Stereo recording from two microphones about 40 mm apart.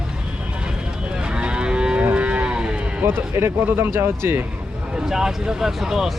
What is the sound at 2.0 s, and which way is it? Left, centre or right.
Livestock, right.